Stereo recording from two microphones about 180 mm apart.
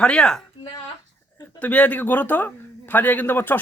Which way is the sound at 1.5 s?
10° left (ahead or behind).